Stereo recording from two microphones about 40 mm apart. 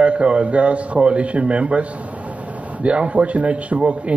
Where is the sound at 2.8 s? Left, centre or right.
Right.